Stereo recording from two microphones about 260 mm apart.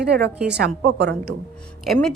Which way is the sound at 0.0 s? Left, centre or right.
Right.